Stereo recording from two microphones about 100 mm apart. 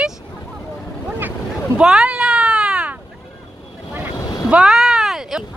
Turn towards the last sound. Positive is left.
turn(degrees=-5)  # may be behind; listen again after turning